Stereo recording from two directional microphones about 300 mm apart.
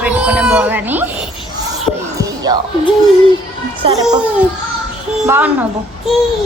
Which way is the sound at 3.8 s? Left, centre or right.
Centre.